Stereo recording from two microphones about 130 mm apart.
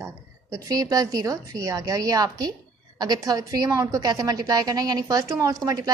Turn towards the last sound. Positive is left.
turn(degrees=-25)  # may be behind; listen again after turning